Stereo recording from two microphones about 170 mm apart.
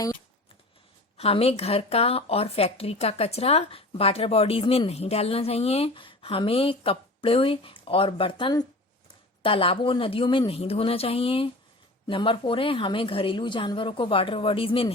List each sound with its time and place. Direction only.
1.1 s speech: 35° left (ahead or behind)